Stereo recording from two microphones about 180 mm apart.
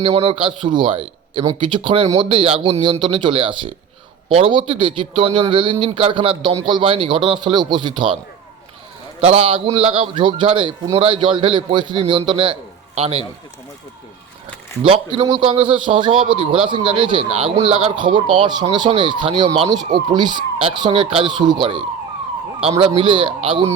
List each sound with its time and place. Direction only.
0.0 s speech: 30° right (ahead or behind)
9.2 s a man's voice: 30° right (ahead or behind)
14.8 s speech: 30° right (ahead or behind)
23.0 s speech: 30° right (ahead or behind)